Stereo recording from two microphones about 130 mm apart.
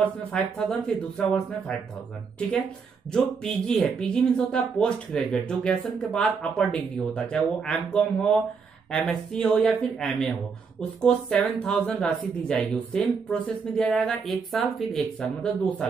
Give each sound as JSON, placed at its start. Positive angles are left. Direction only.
{"t": 0.0, "sound": "speech", "side_deg": 5}
{"t": 3.1, "sound": "speech", "side_deg": 5}